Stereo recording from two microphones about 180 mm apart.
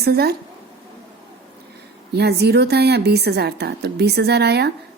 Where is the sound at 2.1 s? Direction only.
65° right (ahead or behind).